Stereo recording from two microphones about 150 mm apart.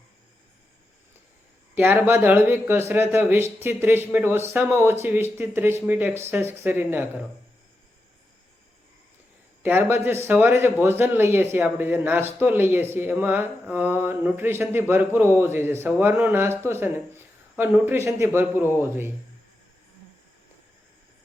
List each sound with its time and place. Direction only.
1.7 s speech: 15° right (ahead or behind)
9.6 s speech: 15° right (ahead or behind)